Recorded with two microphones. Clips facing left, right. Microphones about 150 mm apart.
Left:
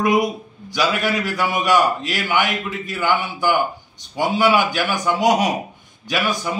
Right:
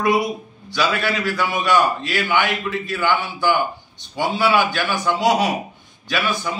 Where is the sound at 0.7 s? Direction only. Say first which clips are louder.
Left 1 dB; 15° left (ahead or behind).